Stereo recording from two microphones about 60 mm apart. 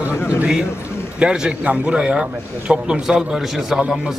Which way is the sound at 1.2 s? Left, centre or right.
Centre.